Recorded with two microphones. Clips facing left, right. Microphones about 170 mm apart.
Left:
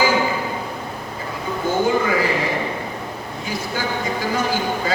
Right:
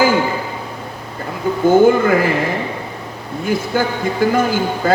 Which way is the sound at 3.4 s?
55° right (ahead or behind).